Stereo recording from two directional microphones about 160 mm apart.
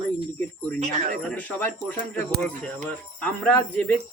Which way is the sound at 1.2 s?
5° left (ahead or behind).